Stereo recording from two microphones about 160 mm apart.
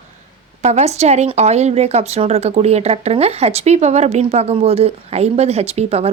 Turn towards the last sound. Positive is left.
turn(degrees=-40)  # may be behind; listen again after turning